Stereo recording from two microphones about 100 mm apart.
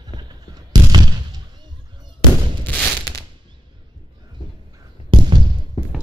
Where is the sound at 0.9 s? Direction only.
40° right (ahead or behind).